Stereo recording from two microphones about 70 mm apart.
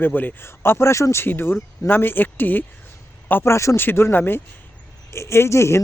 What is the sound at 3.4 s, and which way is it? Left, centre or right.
Speech, left.